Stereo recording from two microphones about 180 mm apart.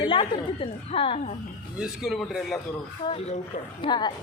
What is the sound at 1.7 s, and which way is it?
Speech, 5° right (ahead or behind).